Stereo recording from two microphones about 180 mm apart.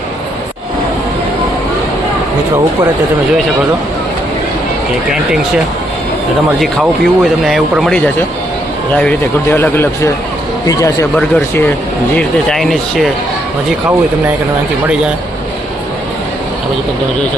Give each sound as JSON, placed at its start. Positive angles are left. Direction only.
{"t": 6.6, "sound": "speech", "side_deg": 0}
{"t": 11.1, "sound": "speech", "side_deg": 5}
{"t": 13.7, "sound": "speech", "side_deg": -10}